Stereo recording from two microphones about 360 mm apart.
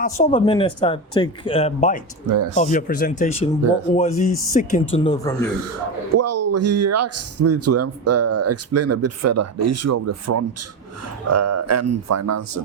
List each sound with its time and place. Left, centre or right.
0.0 s speech: centre
2.3 s speech: right
2.6 s speech: left
6.1 s a man's voice: right